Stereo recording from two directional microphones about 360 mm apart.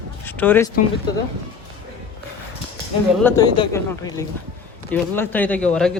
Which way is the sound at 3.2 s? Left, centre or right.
Centre.